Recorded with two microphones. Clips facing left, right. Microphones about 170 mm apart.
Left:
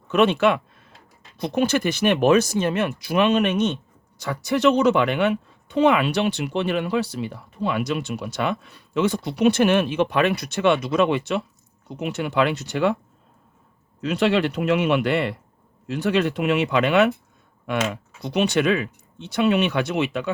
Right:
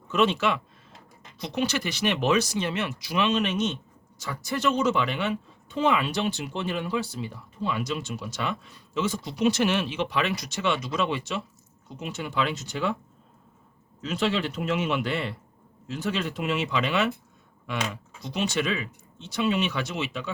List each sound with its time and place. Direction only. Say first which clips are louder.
0.1 s speech: left 6 dB; 60° left (ahead or behind)
14.0 s speech: left 7 dB; 65° left (ahead or behind)